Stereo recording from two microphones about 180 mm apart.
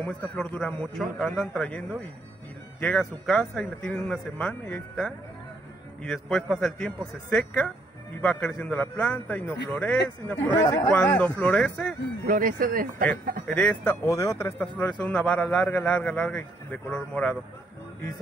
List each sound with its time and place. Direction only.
0.0 s speech: 5° left (ahead or behind)
2.8 s speech: 5° left (ahead or behind)
12.3 s speech: 50° right (ahead or behind)
13.5 s speech: 5° left (ahead or behind)
14.0 s speech: 15° left (ahead or behind)